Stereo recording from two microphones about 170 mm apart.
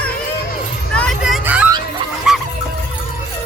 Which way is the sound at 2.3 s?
5° right (ahead or behind).